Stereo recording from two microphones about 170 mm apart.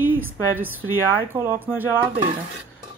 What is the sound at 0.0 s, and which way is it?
A woman's voice, 10° right (ahead or behind).